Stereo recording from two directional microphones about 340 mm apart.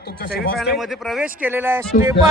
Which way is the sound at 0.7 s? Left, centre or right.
Centre.